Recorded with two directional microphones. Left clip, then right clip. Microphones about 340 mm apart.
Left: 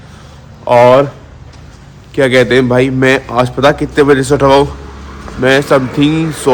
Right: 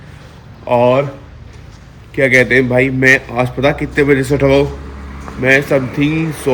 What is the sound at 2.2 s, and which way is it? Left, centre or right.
A man's voice, centre.